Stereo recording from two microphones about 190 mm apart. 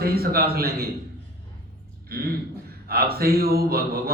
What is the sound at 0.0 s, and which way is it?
Speech, 55° right (ahead or behind).